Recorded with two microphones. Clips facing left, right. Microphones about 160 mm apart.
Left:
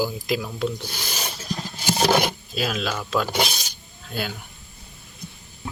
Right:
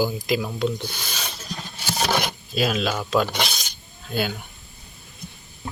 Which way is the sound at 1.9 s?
30° left (ahead or behind).